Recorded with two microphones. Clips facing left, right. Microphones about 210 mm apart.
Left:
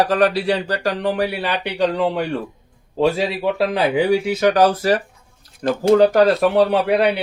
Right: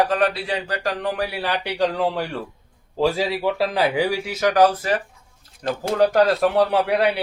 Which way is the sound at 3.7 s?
25° left (ahead or behind).